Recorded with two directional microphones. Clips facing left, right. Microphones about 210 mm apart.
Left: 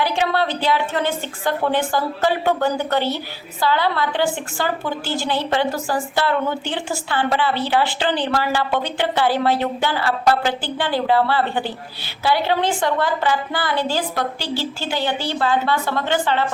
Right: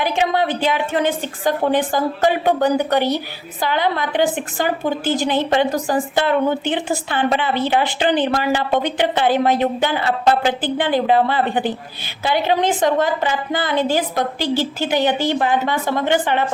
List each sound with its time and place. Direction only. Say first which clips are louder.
0.0 s a woman's voice: right 2 dB; 15° right (ahead or behind)